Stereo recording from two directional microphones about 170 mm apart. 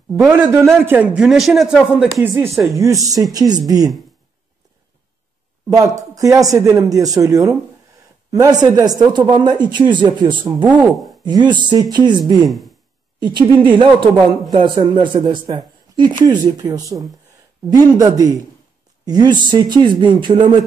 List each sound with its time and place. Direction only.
0.3 s speech: 15° right (ahead or behind)
2.7 s speech: 20° right (ahead or behind)
5.7 s speech: 20° right (ahead or behind)
10.6 s speech: 10° right (ahead or behind)
11.2 s speech: 25° right (ahead or behind)
12.4 s speech: centre (ahead or behind)
13.2 s speech: 25° right (ahead or behind)
15.2 s speech: 25° right (ahead or behind)